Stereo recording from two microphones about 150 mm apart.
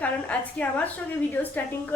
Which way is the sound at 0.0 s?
10° left (ahead or behind).